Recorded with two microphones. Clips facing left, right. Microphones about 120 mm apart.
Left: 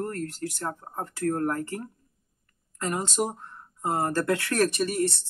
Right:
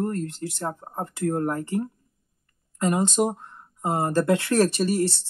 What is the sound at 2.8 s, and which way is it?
Speech, 20° right (ahead or behind).